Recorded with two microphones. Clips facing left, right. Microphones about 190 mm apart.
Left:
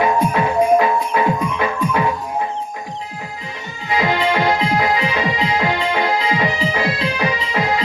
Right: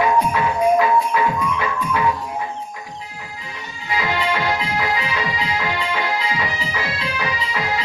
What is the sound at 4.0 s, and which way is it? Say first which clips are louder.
Music: left 5 dB; 30° left (ahead or behind).